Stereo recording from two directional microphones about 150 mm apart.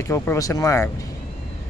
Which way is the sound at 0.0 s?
15° left (ahead or behind).